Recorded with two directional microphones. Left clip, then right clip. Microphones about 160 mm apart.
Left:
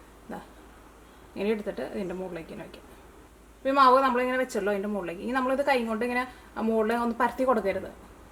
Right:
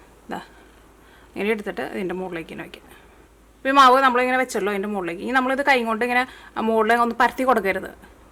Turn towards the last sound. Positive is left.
turn(degrees=-30)  # may be behind; listen again after turning